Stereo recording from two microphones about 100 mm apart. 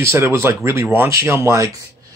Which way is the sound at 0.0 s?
25° right (ahead or behind).